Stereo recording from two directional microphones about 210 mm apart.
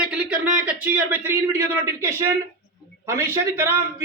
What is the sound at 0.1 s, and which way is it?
A man's voice, 5° right (ahead or behind).